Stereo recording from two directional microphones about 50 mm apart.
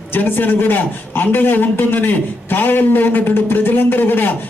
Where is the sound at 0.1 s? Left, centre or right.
Left.